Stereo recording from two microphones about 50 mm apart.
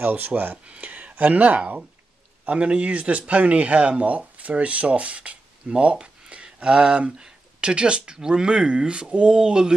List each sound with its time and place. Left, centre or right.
0.0 s speech: right